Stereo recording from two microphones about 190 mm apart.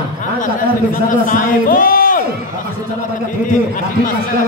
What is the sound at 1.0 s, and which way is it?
A man's voice, 45° left (ahead or behind).